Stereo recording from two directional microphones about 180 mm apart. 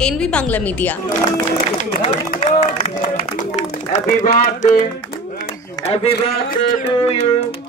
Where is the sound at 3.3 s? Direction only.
40° left (ahead or behind).